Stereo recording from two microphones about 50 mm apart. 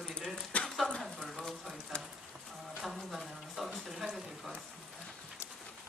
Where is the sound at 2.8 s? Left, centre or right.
Centre.